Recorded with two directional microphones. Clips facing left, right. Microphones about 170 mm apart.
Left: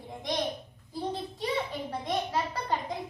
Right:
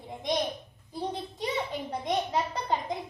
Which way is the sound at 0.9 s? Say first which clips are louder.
Even; 20° right (ahead or behind).